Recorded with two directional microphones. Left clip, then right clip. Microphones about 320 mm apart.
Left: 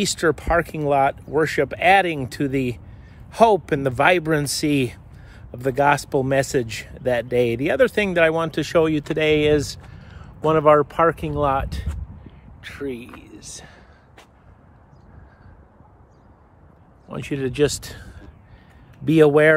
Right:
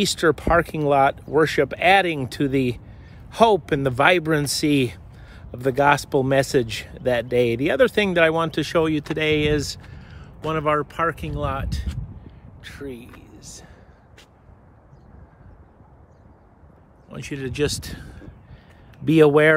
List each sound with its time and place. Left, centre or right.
0.0 s speech: centre
12.3 s a sound: centre
17.1 s speech: centre